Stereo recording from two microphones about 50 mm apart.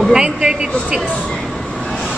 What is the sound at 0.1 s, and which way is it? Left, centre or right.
Speech, centre.